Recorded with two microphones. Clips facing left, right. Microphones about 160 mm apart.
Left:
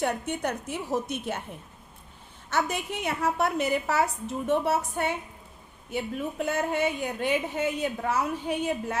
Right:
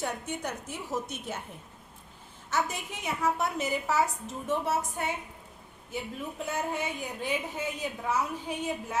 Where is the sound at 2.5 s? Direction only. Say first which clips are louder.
Left 3 dB; 65° left (ahead or behind).